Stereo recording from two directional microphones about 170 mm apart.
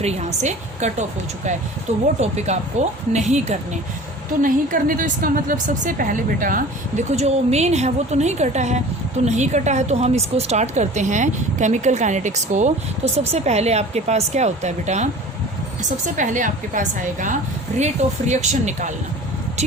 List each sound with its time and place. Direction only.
0.0 s a woman's voice: 40° right (ahead or behind)
7.2 s a woman's voice: 40° right (ahead or behind)